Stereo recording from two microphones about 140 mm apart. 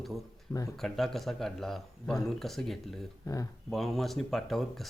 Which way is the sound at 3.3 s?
25° left (ahead or behind).